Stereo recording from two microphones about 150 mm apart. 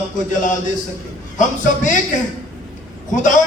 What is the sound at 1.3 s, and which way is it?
Speech, 60° left (ahead or behind).